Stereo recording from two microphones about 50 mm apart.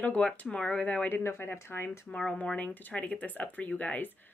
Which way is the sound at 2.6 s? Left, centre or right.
Left.